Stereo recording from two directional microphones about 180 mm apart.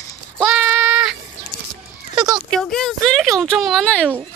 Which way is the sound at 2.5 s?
Centre (ahead or behind).